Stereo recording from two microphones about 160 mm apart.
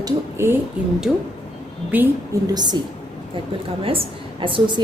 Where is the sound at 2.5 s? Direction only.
25° right (ahead or behind).